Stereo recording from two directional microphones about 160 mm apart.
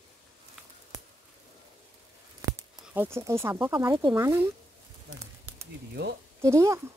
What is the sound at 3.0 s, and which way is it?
Speech, 15° right (ahead or behind).